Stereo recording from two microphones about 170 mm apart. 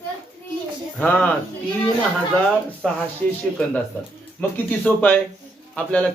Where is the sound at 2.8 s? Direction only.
5° left (ahead or behind).